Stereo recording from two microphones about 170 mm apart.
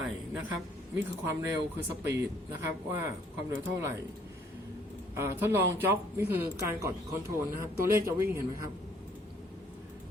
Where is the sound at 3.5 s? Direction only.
15° right (ahead or behind).